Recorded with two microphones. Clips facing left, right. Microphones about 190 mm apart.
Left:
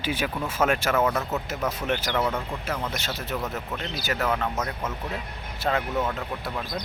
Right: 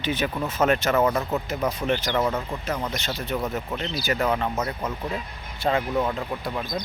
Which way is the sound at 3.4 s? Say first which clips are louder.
Right 3 dB; 15° right (ahead or behind).